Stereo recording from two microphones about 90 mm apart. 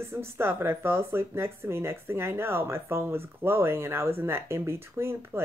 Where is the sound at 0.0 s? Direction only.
30° right (ahead or behind).